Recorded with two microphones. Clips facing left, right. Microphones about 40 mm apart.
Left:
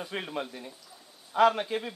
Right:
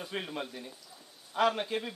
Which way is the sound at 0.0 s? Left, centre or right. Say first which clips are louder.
Left 3 dB; centre.